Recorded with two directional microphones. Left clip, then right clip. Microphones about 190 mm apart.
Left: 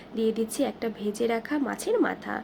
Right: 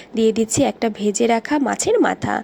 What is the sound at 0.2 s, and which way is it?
Speech, 40° right (ahead or behind).